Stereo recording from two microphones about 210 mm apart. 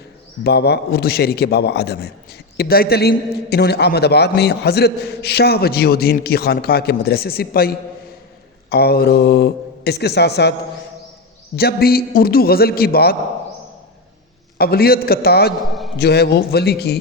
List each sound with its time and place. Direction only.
0.4 s a man's voice: 50° left (ahead or behind)
11.5 s a man's voice: 45° left (ahead or behind)
14.6 s a man's voice: 45° left (ahead or behind)
15.7 s a sound: centre (ahead or behind)
16.0 s a man's voice: 50° left (ahead or behind)